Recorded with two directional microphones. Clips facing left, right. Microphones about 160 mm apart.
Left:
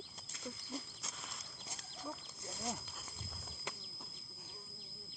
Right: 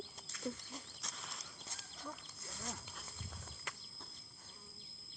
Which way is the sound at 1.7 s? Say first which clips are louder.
Left 3 dB; 15° left (ahead or behind).